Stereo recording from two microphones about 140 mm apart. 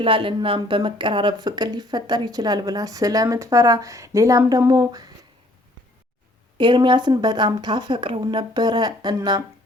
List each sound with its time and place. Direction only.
0.0 s speech: 40° right (ahead or behind)
6.6 s a woman's voice: 35° right (ahead or behind)